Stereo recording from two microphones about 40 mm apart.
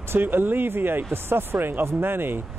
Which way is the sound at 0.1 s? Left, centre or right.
Right.